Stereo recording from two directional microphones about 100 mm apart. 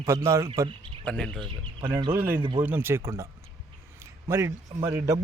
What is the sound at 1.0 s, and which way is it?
Speech, 5° left (ahead or behind).